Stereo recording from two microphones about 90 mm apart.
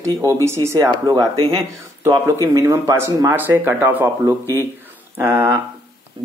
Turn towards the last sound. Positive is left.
turn(degrees=-25)  # may be behind; listen again after turning